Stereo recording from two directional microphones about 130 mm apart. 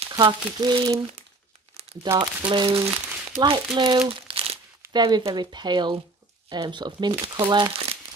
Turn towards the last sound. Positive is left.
turn(degrees=-40)  # may be behind; listen again after turning